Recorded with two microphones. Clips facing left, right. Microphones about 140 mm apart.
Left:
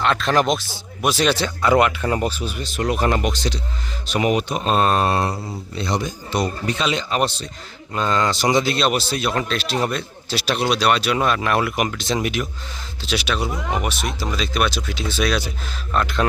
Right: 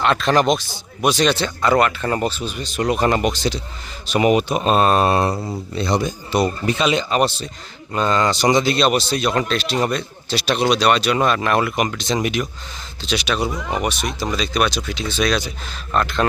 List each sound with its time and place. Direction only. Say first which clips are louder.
0.0 s a man's voice: right 2 dB; centre (ahead or behind)
5.7 s speech: right 3 dB; 35° right (ahead or behind)
6.3 s a man's voice: right 3 dB; 5° right (ahead or behind)